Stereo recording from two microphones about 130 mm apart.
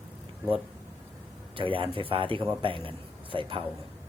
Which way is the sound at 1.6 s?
40° right (ahead or behind).